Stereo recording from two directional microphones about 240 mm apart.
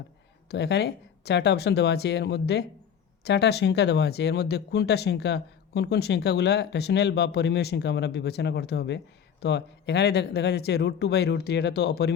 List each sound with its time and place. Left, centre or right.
0.4 s speech: left